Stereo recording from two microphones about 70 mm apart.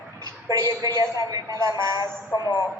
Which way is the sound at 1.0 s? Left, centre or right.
Right.